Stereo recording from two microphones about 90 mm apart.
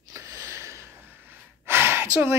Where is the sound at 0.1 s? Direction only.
30° right (ahead or behind).